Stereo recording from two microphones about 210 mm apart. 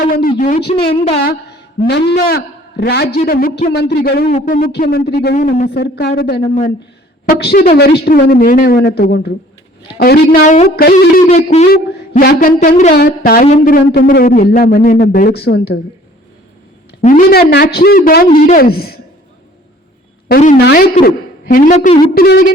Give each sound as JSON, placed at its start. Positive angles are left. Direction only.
{"t": 0.0, "sound": "a woman's voice", "side_deg": 40}
{"t": 4.3, "sound": "a woman's voice", "side_deg": 35}
{"t": 13.0, "sound": "a woman's voice", "side_deg": 45}
{"t": 17.0, "sound": "a woman's voice", "side_deg": 40}
{"t": 20.2, "sound": "a woman's voice", "side_deg": 40}